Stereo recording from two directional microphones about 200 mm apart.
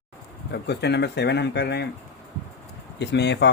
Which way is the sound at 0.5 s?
55° left (ahead or behind).